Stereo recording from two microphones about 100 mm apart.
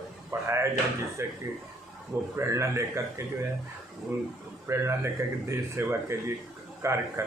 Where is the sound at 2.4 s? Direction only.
30° right (ahead or behind).